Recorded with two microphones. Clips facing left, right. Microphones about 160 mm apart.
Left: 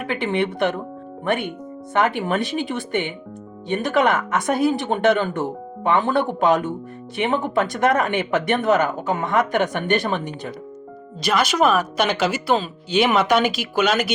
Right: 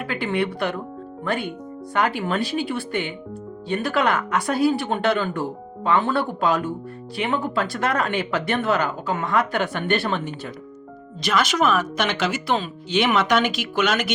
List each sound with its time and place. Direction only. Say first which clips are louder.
0.1 s speech: left 2 dB; 20° left (ahead or behind)
11.3 s speech: left 2 dB; 35° left (ahead or behind)
12.1 s speech: left 3 dB; 10° left (ahead or behind)
13.8 s speech: left 3 dB; 35° left (ahead or behind)